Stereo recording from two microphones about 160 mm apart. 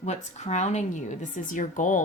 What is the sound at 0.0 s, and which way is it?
A woman's voice, 45° left (ahead or behind).